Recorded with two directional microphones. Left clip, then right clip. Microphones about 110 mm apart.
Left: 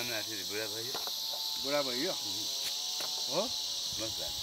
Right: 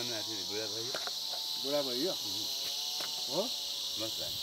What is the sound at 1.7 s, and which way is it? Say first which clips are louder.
Speech: even; 55° left (ahead or behind).